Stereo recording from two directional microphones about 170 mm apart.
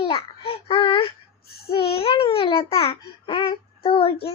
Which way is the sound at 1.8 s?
35° left (ahead or behind).